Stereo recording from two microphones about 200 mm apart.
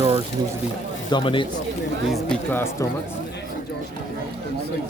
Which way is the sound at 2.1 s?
5° left (ahead or behind).